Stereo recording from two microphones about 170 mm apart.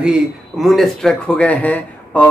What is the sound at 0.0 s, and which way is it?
Speech, 5° right (ahead or behind).